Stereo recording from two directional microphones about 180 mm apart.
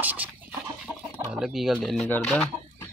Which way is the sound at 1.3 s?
Centre (ahead or behind).